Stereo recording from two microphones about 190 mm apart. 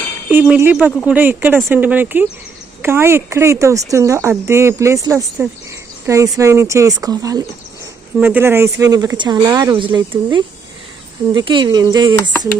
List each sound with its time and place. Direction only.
0.3 s speech: 10° right (ahead or behind)